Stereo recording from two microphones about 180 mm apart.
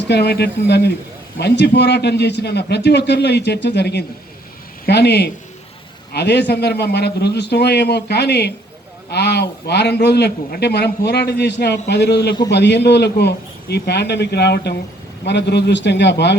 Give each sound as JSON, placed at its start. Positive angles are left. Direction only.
{"t": 0.1, "sound": "a man's voice", "side_deg": 65}